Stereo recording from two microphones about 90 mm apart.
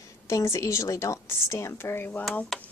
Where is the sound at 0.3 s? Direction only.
35° left (ahead or behind).